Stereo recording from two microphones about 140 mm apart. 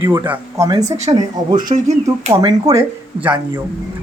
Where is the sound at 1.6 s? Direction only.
75° right (ahead or behind).